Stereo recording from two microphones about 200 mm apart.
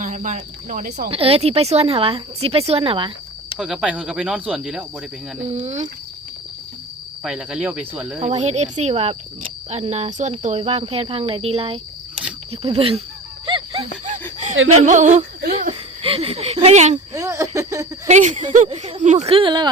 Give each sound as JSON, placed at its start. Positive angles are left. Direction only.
{"t": 0.0, "sound": "speech", "side_deg": -40}
{"t": 1.0, "sound": "speech", "side_deg": -30}
{"t": 3.6, "sound": "speech", "side_deg": -5}
{"t": 5.5, "sound": "speech", "side_deg": -30}
{"t": 7.3, "sound": "speech", "side_deg": -5}
{"t": 8.2, "sound": "speech", "side_deg": -35}
{"t": 14.0, "sound": "laughter", "side_deg": -40}
{"t": 14.5, "sound": "speech", "side_deg": -80}
{"t": 14.8, "sound": "a sound", "side_deg": -35}
{"t": 16.0, "sound": "speech", "side_deg": -30}
{"t": 17.2, "sound": "speech", "side_deg": -15}
{"t": 18.1, "sound": "speech", "side_deg": -35}